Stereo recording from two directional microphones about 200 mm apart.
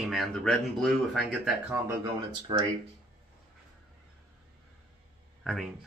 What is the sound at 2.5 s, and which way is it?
Speech, 25° right (ahead or behind).